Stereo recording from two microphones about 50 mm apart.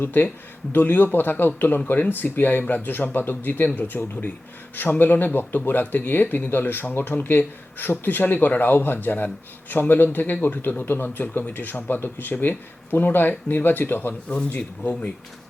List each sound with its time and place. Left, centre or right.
0.0 s speech: left
14.3 s speech: left